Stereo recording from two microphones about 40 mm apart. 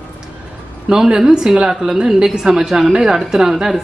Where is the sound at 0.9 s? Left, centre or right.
Centre.